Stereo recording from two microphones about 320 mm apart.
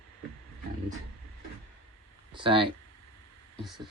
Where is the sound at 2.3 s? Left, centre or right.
Centre.